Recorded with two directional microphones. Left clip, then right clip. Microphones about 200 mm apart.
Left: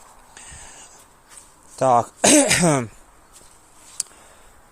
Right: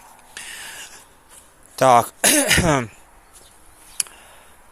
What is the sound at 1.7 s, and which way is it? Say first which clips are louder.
Speech: right 3 dB; 10° right (ahead or behind).